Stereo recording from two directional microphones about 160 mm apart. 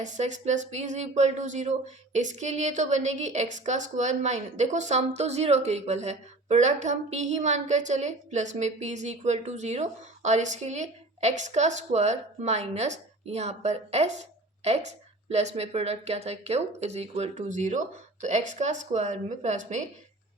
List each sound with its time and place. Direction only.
0.0 s a woman's voice: 50° right (ahead or behind)